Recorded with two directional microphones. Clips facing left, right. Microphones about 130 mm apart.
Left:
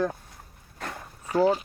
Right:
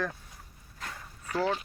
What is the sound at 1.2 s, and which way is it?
Speech, 25° left (ahead or behind).